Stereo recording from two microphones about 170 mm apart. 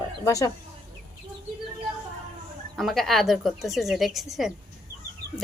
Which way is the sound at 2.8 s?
Centre (ahead or behind).